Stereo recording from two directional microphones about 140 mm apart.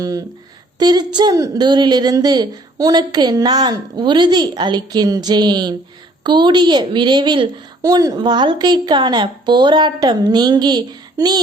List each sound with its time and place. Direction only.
0.0 s a woman's voice: 25° right (ahead or behind)